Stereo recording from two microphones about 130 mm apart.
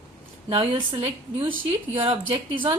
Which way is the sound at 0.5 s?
45° right (ahead or behind).